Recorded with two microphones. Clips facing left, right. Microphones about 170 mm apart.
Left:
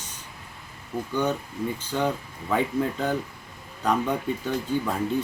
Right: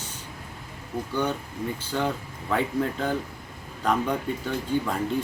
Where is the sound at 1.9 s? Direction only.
10° left (ahead or behind).